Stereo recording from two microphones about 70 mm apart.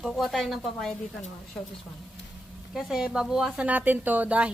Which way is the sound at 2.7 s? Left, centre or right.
Centre.